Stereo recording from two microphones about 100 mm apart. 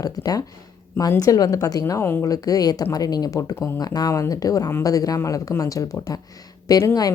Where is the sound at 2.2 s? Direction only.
40° left (ahead or behind).